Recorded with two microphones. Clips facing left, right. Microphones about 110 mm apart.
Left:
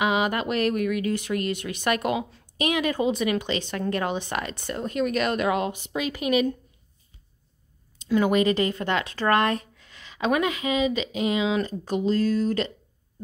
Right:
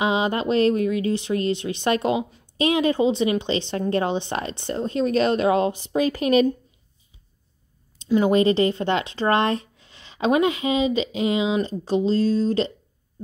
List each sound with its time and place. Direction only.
0.0 s speech: 30° right (ahead or behind)
8.0 s speech: 25° right (ahead or behind)